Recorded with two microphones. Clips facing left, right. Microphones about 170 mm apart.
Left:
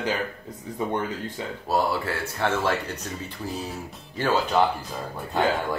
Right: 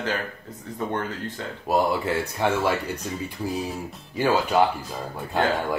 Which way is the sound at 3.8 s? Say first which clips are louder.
Right 3 dB; centre (ahead or behind).